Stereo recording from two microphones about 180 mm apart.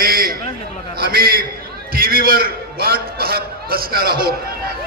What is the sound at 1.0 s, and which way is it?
A man's voice, 55° right (ahead or behind).